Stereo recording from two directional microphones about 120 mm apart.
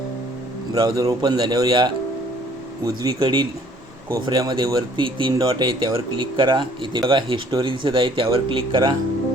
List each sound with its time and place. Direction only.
0.8 s speech: 35° right (ahead or behind)